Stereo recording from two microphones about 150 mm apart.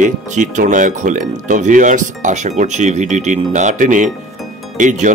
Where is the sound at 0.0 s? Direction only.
55° right (ahead or behind).